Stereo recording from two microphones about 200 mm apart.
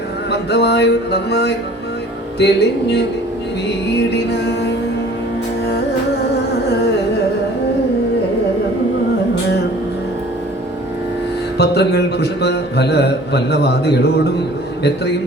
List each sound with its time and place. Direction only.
0.3 s a man's voice: 55° left (ahead or behind)
4.1 s a man's voice: 55° left (ahead or behind)
11.5 s a man's voice: 55° left (ahead or behind)